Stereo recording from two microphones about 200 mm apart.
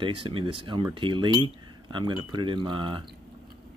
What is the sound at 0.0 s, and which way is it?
Speech, 25° right (ahead or behind).